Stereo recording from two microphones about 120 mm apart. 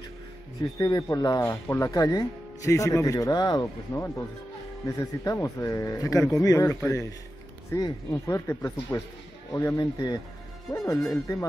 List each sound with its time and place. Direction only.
0.6 s speech: 30° left (ahead or behind)
1.5 s speech: 15° left (ahead or behind)
1.9 s speech: 30° left (ahead or behind)